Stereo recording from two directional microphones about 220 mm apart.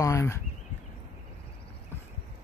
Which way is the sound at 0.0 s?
15° left (ahead or behind).